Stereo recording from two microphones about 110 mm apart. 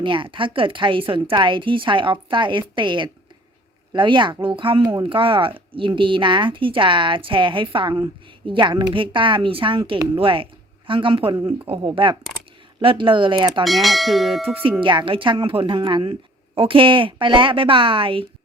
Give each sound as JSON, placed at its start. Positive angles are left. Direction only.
{"t": 0.0, "sound": "speech", "side_deg": -50}
{"t": 13.7, "sound": "speech", "side_deg": 0}
{"t": 14.6, "sound": "speech", "side_deg": -50}